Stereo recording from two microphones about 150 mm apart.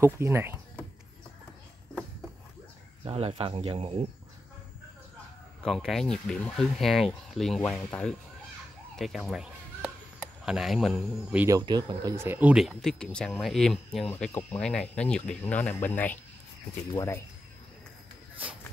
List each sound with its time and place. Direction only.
0.0 s speech: 15° right (ahead or behind)
3.1 s speech: 40° right (ahead or behind)
5.6 s speech: centre (ahead or behind)
8.9 s music: centre (ahead or behind)
10.4 s speech: 5° right (ahead or behind)
11.4 s speech: 25° right (ahead or behind); by 14.1 s centre (ahead or behind)
14.1 s speech: 15° left (ahead or behind)